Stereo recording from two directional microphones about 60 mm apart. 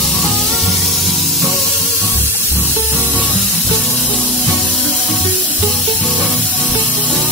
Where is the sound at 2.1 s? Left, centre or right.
Right.